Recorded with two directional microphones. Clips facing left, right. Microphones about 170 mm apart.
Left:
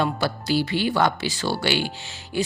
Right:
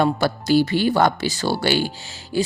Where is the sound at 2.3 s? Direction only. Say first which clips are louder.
Right 3 dB; 35° right (ahead or behind).